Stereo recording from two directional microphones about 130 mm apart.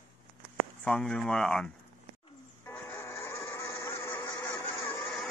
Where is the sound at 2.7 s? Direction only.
20° left (ahead or behind).